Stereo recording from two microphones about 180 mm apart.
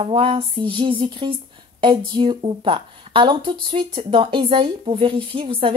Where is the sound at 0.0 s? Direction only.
30° right (ahead or behind).